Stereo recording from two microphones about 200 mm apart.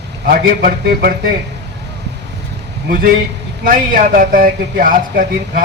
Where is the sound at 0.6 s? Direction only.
50° right (ahead or behind).